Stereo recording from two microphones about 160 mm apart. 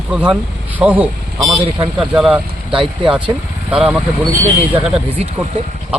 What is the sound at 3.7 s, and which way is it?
Speech, 5° right (ahead or behind).